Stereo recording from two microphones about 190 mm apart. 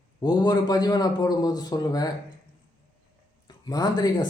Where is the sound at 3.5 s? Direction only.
20° left (ahead or behind).